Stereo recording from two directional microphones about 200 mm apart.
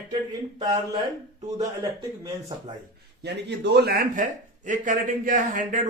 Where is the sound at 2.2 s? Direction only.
20° right (ahead or behind).